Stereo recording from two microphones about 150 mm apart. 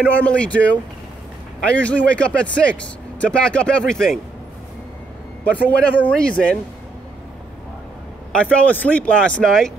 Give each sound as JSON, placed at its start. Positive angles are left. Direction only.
{"t": 0.1, "sound": "speech", "side_deg": 10}
{"t": 1.8, "sound": "speech", "side_deg": 10}
{"t": 5.4, "sound": "speech", "side_deg": 10}
{"t": 8.3, "sound": "speech", "side_deg": 5}